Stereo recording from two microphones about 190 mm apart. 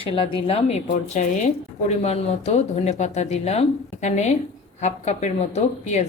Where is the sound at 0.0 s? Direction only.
30° left (ahead or behind).